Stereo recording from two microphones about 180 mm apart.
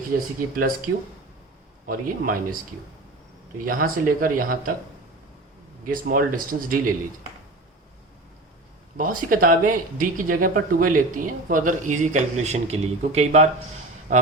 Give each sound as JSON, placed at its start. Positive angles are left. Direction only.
{"t": 0.1, "sound": "speech", "side_deg": -50}
{"t": 1.9, "sound": "speech", "side_deg": -50}
{"t": 3.7, "sound": "speech", "side_deg": -50}
{"t": 5.8, "sound": "speech", "side_deg": -55}
{"t": 9.0, "sound": "speech", "side_deg": -50}